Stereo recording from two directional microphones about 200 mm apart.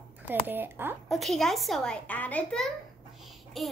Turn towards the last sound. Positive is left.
turn(degrees=0)  # may be behind; listen again after turning